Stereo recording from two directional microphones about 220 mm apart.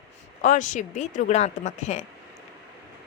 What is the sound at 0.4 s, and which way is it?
A woman's voice, 35° left (ahead or behind).